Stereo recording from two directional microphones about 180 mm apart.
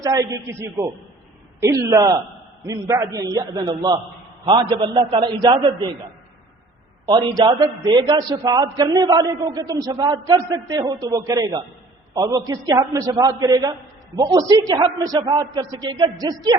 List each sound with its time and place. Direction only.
0.0 s a man's voice: 20° right (ahead or behind)
7.0 s a man's voice: 20° right (ahead or behind)